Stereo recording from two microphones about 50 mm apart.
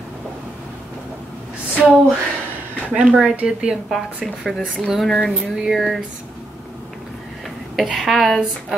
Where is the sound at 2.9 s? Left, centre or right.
Centre.